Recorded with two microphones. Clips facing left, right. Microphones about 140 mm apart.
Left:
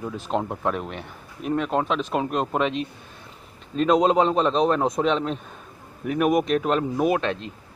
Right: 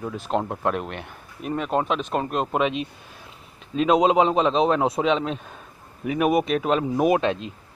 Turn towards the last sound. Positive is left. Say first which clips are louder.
# right 2 dB
turn(degrees=-15)  # may be behind; listen again after turning